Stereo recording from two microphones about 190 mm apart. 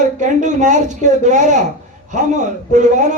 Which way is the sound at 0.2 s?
40° right (ahead or behind).